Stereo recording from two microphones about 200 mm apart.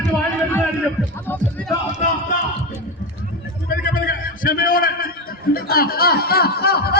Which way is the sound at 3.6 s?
45° left (ahead or behind).